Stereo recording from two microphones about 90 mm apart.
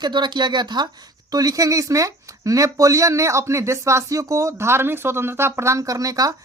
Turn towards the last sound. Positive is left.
turn(degrees=-40)  # may be behind; listen again after turning